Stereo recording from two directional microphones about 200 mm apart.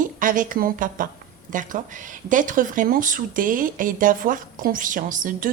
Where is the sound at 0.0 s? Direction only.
40° right (ahead or behind).